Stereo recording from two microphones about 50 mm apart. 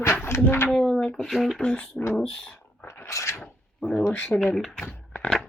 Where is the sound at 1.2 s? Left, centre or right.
Centre.